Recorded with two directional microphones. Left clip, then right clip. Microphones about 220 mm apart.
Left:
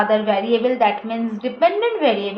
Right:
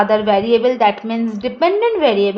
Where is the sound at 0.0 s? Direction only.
50° right (ahead or behind).